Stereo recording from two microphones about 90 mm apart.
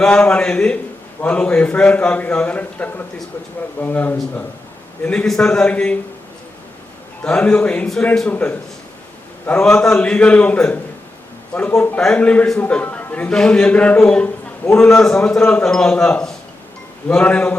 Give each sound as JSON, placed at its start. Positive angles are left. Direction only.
{"t": 0.0, "sound": "a man's voice", "side_deg": 15}
{"t": 5.0, "sound": "a man's voice", "side_deg": 10}
{"t": 7.2, "sound": "a man's voice", "side_deg": 15}